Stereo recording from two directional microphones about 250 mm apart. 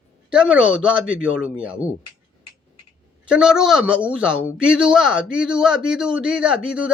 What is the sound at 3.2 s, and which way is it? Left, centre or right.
Speech, centre.